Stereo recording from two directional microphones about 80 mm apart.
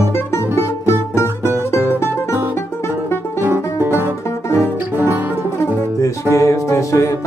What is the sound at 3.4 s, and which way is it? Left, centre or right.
Music, right.